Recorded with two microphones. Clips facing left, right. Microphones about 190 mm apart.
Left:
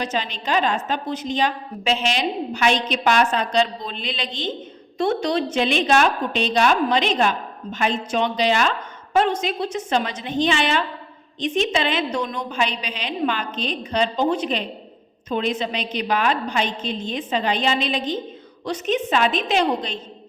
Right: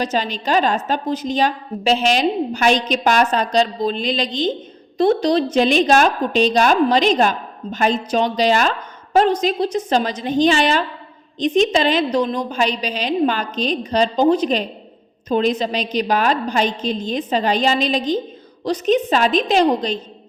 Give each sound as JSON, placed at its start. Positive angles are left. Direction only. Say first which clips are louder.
{"t": 0.0, "sound": "a woman's voice", "louder": "right 5 dB", "side_deg": -40}